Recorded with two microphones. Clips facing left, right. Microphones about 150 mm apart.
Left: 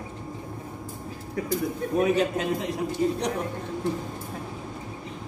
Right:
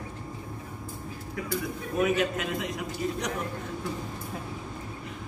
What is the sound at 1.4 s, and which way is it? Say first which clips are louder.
A man's voice: left 5 dB; 35° left (ahead or behind).